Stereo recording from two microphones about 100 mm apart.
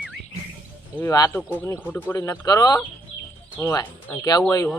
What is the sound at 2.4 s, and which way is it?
Speech, 35° left (ahead or behind).